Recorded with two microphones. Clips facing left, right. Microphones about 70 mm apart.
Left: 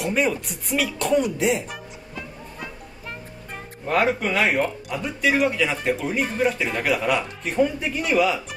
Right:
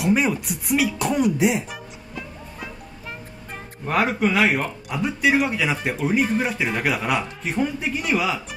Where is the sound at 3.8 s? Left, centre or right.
Centre.